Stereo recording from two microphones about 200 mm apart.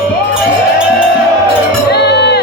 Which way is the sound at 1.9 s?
55° left (ahead or behind).